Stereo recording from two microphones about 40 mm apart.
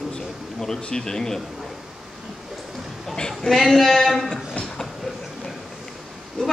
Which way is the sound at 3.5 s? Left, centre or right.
Centre.